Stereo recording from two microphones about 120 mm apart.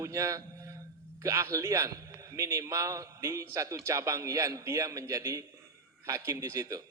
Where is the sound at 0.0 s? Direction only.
25° right (ahead or behind).